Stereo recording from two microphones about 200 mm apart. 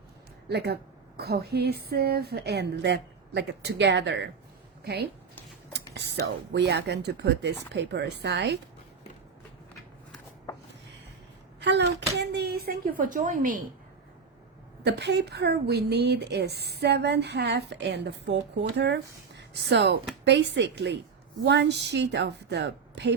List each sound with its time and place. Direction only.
0.5 s a woman's voice: 55° right (ahead or behind)
11.6 s speech: 60° right (ahead or behind); by 13.6 s 40° right (ahead or behind)
14.8 s a woman's voice: 55° right (ahead or behind)
19.4 s a woman's voice: 60° right (ahead or behind)